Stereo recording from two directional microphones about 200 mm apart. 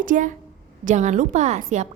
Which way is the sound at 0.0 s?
40° right (ahead or behind).